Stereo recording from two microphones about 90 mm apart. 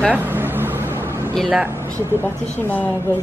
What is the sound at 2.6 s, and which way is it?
Speech, 20° left (ahead or behind).